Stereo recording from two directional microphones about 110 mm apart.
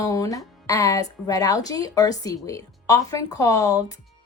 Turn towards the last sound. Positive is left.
turn(degrees=30)  # may be behind; listen again after turning